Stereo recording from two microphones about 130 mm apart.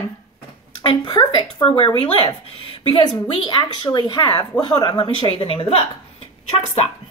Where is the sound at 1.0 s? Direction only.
30° left (ahead or behind).